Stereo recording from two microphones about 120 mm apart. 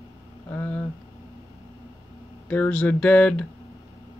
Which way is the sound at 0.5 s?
15° left (ahead or behind).